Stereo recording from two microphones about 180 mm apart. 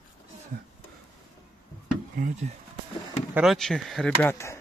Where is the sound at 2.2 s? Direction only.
40° right (ahead or behind).